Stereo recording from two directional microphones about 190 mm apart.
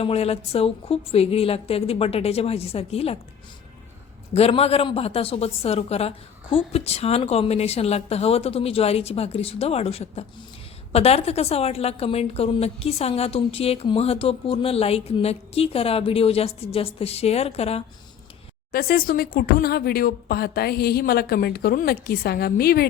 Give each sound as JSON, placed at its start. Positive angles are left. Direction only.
{"t": 0.0, "sound": "a woman's voice", "side_deg": 30}
{"t": 4.4, "sound": "a woman's voice", "side_deg": 35}
{"t": 18.7, "sound": "speech", "side_deg": 50}